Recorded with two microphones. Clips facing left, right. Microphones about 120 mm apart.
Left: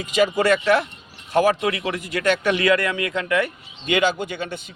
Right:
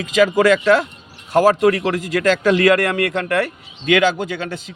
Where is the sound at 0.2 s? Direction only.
90° right.